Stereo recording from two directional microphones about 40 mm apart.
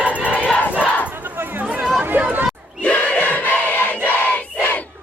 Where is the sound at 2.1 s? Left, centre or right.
Right.